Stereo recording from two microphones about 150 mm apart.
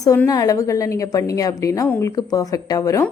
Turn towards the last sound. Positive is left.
turn(degrees=20)  # may be behind; listen again after turning